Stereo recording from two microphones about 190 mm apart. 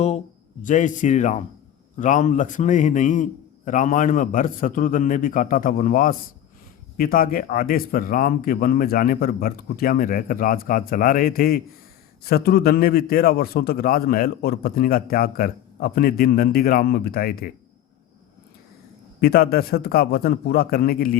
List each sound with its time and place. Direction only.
0.6 s a man's voice: 40° left (ahead or behind)
19.2 s a man's voice: 55° left (ahead or behind)